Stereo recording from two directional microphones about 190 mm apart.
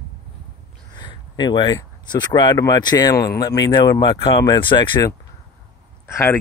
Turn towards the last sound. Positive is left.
turn(degrees=10)  # may be behind; listen again after turning